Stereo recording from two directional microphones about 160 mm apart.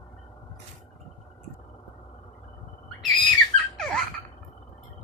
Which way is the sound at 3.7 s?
Centre (ahead or behind).